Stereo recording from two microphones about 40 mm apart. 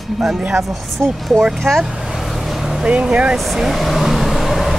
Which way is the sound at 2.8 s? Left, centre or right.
Right.